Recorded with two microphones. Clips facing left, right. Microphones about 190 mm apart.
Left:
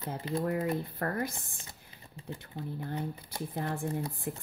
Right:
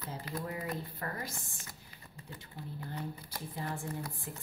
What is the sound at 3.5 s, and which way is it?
Speech, 55° left (ahead or behind).